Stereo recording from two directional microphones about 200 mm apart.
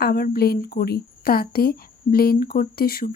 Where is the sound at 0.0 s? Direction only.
50° left (ahead or behind).